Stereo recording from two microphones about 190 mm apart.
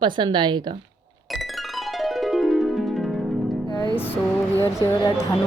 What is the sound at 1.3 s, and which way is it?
Music, centre (ahead or behind).